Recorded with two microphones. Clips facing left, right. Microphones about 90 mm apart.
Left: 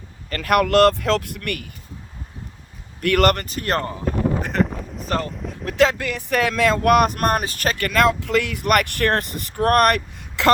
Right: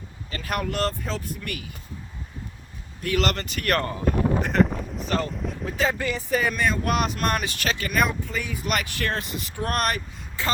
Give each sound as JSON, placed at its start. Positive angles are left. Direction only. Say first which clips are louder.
{"t": 0.3, "sound": "speech", "louder": "left 10 dB", "side_deg": 60}
{"t": 3.0, "sound": "speech", "louder": "left 7 dB", "side_deg": 60}
{"t": 3.4, "sound": "speech", "louder": "left 1 dB", "side_deg": 30}
{"t": 4.0, "sound": "boat", "louder": "left 1 dB", "side_deg": 0}
{"t": 5.3, "sound": "speech", "louder": "right 1 dB", "side_deg": 0}
{"t": 5.6, "sound": "speech", "louder": "left 7 dB", "side_deg": 85}
{"t": 7.9, "sound": "speech", "louder": "left 8 dB", "side_deg": 90}